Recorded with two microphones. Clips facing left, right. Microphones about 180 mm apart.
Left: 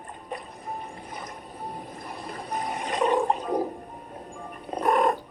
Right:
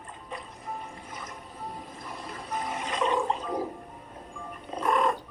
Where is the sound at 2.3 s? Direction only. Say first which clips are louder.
Left 2 dB; 40° left (ahead or behind).